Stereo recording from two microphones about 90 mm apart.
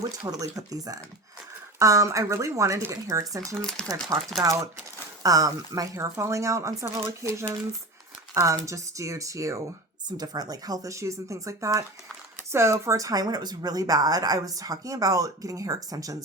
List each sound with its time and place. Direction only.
0.3 s speech: 40° right (ahead or behind)
3.5 s speech: 5° left (ahead or behind)
4.4 s speech: 40° right (ahead or behind)
10.1 s speech: 50° right (ahead or behind)